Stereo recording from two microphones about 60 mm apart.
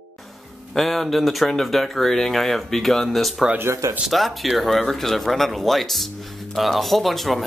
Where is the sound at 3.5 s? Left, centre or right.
Right.